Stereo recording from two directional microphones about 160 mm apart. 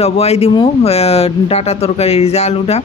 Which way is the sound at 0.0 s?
40° left (ahead or behind).